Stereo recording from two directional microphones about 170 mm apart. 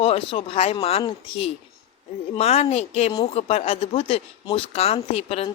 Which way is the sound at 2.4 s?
35° left (ahead or behind).